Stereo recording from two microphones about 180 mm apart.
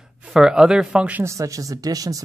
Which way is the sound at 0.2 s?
5° right (ahead or behind).